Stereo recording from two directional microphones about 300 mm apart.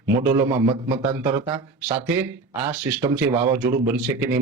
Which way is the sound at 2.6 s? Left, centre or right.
Centre.